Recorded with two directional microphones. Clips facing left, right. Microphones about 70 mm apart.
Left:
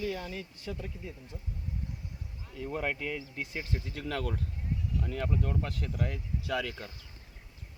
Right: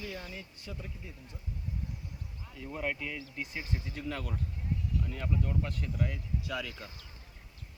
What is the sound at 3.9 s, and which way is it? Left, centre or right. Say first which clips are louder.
Speech: left 3 dB; left.